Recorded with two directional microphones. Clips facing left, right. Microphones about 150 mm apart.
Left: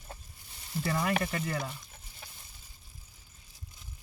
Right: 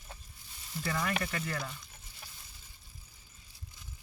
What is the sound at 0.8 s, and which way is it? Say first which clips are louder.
Speech: left 3 dB; 25° left (ahead or behind).